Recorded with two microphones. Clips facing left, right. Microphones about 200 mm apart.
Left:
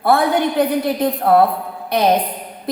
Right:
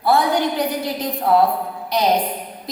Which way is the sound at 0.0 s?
55° left (ahead or behind).